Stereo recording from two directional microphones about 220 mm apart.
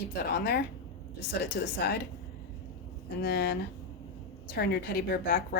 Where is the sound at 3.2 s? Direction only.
45° left (ahead or behind).